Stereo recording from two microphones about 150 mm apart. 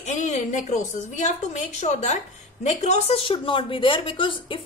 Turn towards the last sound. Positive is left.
turn(degrees=35)  # may be behind; listen again after turning